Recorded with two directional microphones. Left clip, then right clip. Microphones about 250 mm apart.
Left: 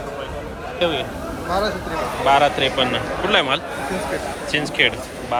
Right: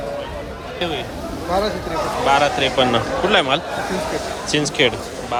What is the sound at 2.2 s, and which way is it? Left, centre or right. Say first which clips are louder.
Speech: left 1 dB; centre.